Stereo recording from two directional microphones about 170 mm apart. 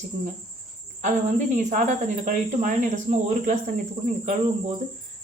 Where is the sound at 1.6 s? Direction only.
45° right (ahead or behind).